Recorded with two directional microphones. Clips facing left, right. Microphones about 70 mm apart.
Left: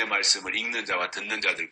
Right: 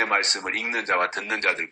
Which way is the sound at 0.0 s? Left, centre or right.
Right.